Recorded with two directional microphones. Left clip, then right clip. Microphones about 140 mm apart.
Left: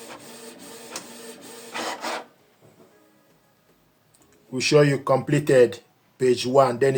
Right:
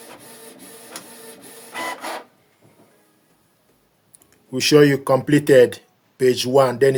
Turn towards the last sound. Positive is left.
turn(degrees=-80)